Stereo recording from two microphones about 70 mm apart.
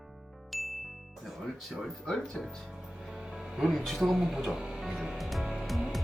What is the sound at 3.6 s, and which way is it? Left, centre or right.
Music, centre.